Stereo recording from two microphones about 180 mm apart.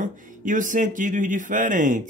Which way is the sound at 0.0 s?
45° right (ahead or behind).